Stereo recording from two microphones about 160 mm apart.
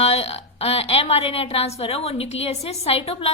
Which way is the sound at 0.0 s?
40° left (ahead or behind).